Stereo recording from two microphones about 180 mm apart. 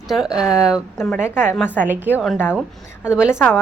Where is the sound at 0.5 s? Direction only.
15° left (ahead or behind).